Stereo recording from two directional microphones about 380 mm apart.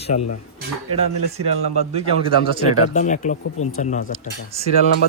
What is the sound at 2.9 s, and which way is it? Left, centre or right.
Speech, centre.